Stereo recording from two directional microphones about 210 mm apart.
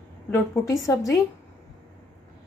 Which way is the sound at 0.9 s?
15° left (ahead or behind).